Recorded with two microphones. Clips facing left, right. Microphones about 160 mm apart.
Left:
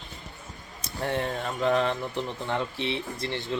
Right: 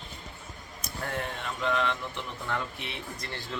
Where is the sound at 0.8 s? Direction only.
30° left (ahead or behind).